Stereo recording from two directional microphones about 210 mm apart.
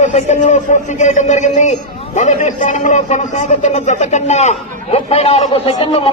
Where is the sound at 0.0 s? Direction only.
35° left (ahead or behind).